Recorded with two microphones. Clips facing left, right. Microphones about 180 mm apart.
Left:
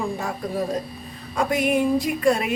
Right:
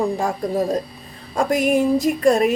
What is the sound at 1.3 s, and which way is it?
Speech, 45° right (ahead or behind).